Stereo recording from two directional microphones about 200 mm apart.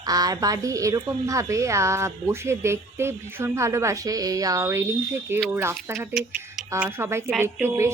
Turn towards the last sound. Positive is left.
turn(degrees=-10)  # may be behind; listen again after turning